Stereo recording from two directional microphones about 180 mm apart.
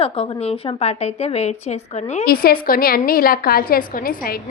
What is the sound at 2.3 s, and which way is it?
A woman's voice, 55° left (ahead or behind).